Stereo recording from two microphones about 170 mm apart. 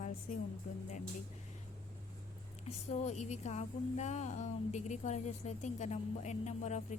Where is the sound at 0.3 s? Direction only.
45° left (ahead or behind).